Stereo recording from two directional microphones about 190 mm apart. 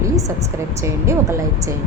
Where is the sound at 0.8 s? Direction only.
15° right (ahead or behind).